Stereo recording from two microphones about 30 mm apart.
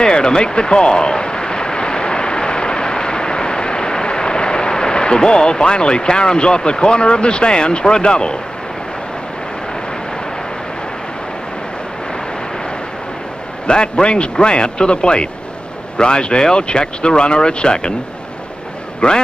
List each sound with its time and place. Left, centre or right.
0.0 s a sound: left
13.7 s speech: left
18.9 s speech: left